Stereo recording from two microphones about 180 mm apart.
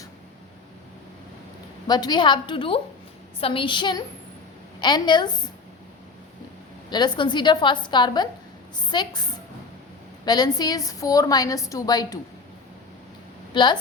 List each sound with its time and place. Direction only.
1.9 s a woman's voice: 25° left (ahead or behind)
6.9 s a woman's voice: 25° left (ahead or behind)
10.2 s a woman's voice: 20° left (ahead or behind)
13.5 s speech: 25° left (ahead or behind)